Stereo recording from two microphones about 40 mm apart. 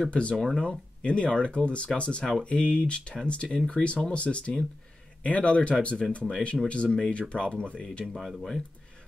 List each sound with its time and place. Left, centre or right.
0.1 s speech: left
8.0 s speech: centre